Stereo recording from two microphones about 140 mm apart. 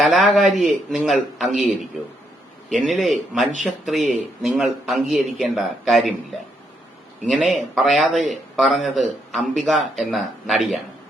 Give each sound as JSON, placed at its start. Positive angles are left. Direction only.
{"t": 0.0, "sound": "a man's voice", "side_deg": 0}
{"t": 2.6, "sound": "a man's voice", "side_deg": 0}
{"t": 7.5, "sound": "a man's voice", "side_deg": 0}